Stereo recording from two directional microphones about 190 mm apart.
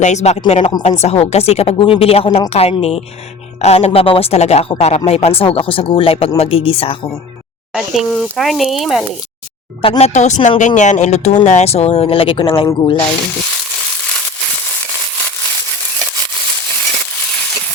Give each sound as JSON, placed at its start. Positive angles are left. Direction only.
{"t": 0.0, "sound": "speech", "side_deg": 35}
{"t": 7.7, "sound": "speech", "side_deg": 0}
{"t": 9.8, "sound": "speech", "side_deg": 30}